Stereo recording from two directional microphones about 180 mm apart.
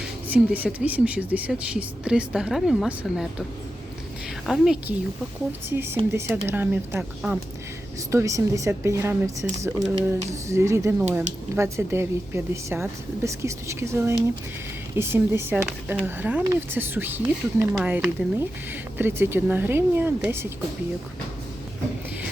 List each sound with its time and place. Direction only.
0.3 s speech: 10° right (ahead or behind)
4.4 s a woman's voice: centre (ahead or behind)